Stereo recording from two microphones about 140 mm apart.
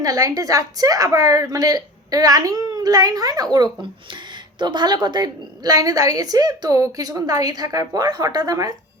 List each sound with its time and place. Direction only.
0.0 s a woman's voice: 25° right (ahead or behind)